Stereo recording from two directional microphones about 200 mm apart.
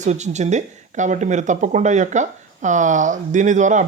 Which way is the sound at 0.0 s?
35° right (ahead or behind).